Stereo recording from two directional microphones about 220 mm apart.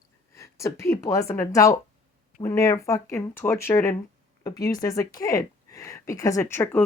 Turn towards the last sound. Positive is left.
turn(degrees=10)  # may be behind; listen again after turning